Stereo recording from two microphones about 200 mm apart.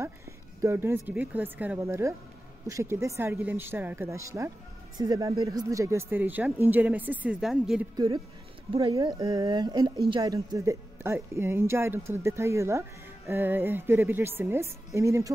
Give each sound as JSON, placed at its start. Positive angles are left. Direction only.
{"t": 0.6, "sound": "speech", "side_deg": -10}
{"t": 7.9, "sound": "speech", "side_deg": -20}